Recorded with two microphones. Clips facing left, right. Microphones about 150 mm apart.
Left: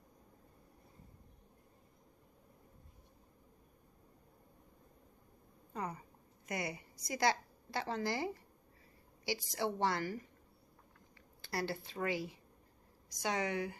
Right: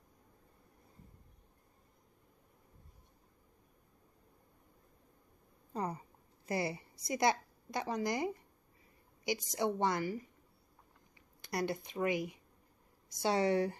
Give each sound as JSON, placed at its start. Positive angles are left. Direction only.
{"t": 5.7, "sound": "a woman's voice", "side_deg": -35}
{"t": 11.4, "sound": "a woman's voice", "side_deg": -20}
{"t": 13.1, "sound": "a woman's voice", "side_deg": -30}